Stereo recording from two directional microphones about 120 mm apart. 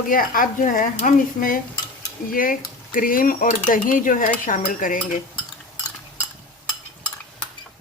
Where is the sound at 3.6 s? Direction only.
90° left.